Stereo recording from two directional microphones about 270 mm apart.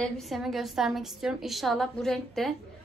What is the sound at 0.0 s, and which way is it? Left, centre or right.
A woman's voice, centre.